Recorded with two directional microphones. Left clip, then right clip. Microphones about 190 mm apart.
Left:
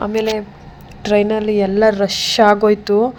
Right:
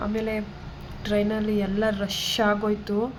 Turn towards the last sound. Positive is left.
turn(degrees=40)  # may be behind; listen again after turning